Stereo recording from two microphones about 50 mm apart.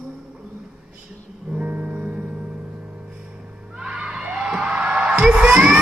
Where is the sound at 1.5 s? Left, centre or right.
Right.